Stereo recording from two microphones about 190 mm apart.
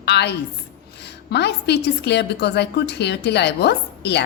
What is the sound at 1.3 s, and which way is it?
A woman's voice, 60° left (ahead or behind).